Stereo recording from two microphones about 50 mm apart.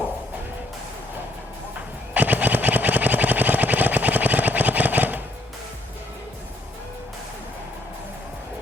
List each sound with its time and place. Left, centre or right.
2.1 s sewing machine: right